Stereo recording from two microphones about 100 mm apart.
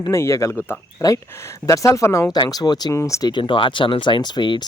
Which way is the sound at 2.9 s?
30° left (ahead or behind).